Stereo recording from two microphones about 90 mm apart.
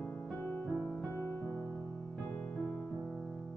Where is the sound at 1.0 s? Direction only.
30° left (ahead or behind).